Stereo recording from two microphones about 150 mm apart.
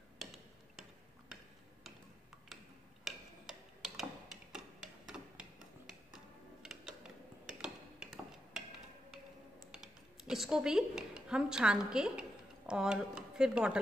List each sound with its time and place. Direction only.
0.2 s tick-tock: centre (ahead or behind)
2.5 s tick-tock: centre (ahead or behind)
9.7 s speech: 5° right (ahead or behind)